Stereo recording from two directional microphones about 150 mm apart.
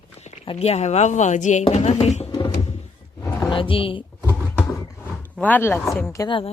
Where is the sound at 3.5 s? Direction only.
35° left (ahead or behind).